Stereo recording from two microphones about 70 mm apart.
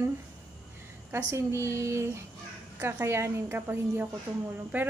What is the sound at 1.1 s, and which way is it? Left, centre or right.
A woman's voice, right.